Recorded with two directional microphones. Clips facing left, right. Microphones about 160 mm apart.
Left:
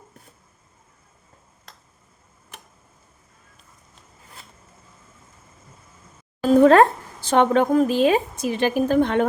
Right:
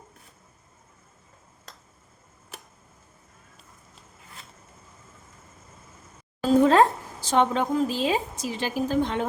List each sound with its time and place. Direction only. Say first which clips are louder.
6.5 s a woman's voice: left 5 dB; 60° left (ahead or behind)